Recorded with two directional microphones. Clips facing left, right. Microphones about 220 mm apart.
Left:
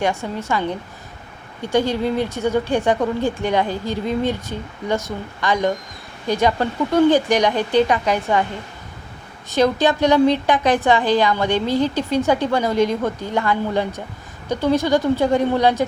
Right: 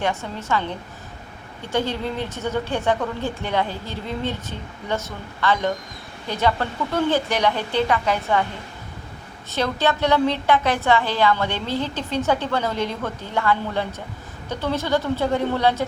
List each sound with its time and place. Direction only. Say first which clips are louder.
0.0 s a woman's voice: left 4 dB; 10° left (ahead or behind)
1.7 s a woman's voice: left 6 dB; 15° left (ahead or behind)
9.5 s a woman's voice: left 6 dB; 15° left (ahead or behind)